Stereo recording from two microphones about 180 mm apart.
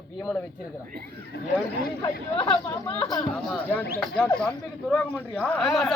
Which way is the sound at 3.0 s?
20° left (ahead or behind).